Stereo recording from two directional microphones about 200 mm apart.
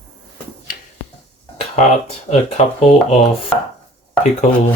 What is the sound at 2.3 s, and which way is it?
Speech, 40° left (ahead or behind).